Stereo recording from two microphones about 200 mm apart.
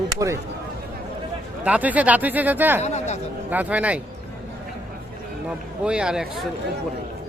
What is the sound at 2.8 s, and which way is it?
Speech, 35° left (ahead or behind).